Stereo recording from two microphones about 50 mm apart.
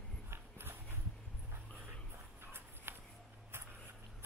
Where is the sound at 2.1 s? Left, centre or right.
Right.